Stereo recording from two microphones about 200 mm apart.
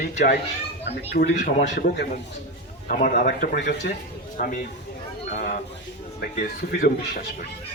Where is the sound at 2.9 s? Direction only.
45° left (ahead or behind).